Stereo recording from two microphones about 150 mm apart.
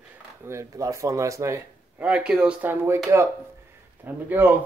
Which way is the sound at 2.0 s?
10° right (ahead or behind).